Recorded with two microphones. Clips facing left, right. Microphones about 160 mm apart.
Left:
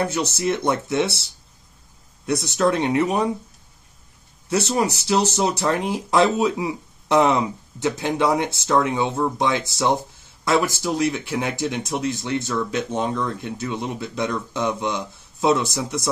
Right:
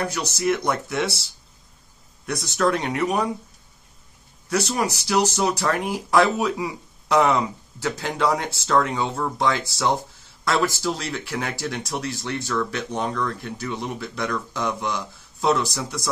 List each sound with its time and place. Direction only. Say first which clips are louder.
0.0 s speech: left 2 dB; 25° left (ahead or behind)
2.2 s speech: left 2 dB; 25° left (ahead or behind)
4.5 s speech: left 2 dB; 25° left (ahead or behind)